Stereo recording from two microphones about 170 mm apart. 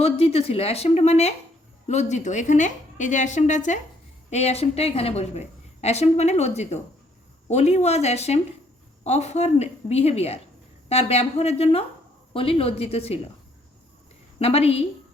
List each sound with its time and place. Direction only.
0.0 s a woman's voice: 35° left (ahead or behind)
14.3 s a woman's voice: 35° left (ahead or behind)